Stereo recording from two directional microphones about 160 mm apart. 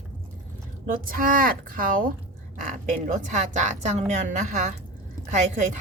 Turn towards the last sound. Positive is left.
turn(degrees=-50)  # may be behind; listen again after turning